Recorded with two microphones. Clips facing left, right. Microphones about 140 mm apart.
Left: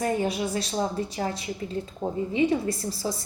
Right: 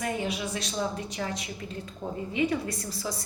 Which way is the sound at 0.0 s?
40° left (ahead or behind).